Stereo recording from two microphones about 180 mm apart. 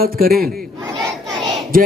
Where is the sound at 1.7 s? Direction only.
50° right (ahead or behind).